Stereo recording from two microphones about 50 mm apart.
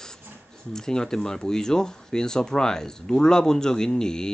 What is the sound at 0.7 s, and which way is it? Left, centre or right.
Speech, centre.